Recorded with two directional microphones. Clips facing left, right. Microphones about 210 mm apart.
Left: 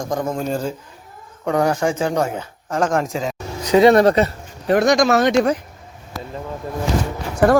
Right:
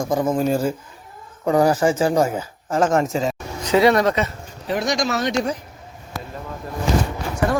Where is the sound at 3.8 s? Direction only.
35° left (ahead or behind).